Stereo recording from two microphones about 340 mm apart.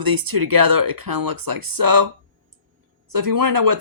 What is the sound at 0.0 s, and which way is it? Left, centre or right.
Speech, right.